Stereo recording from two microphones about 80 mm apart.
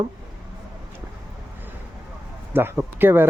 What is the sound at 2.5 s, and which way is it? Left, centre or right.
Speech, right.